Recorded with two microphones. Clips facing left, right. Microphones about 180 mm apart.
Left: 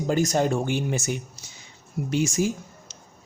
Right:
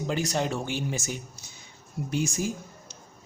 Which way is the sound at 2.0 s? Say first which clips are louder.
Left 5 dB; 80° left.